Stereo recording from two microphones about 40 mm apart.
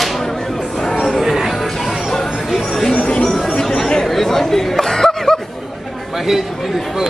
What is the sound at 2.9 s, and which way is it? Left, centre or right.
Music, left.